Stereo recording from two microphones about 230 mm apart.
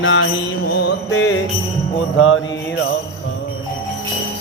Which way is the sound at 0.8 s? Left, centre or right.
Left.